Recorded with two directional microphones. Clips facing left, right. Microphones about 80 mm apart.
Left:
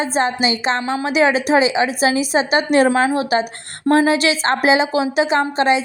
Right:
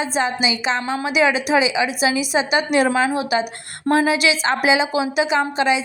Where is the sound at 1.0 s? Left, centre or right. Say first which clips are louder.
Left 3 dB; left.